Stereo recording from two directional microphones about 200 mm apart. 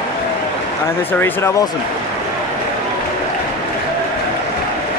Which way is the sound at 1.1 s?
10° left (ahead or behind).